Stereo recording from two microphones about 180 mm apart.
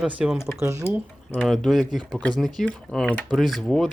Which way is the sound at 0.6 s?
15° right (ahead or behind).